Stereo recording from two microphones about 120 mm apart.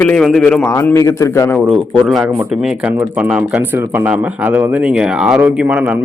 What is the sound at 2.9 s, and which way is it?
A man's voice, 15° right (ahead or behind).